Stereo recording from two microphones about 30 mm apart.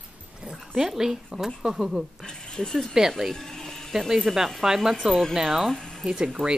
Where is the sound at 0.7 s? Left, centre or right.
Centre.